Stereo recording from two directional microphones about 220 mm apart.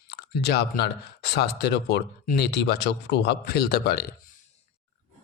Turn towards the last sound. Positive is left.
turn(degrees=45)  # may be behind; listen again after turning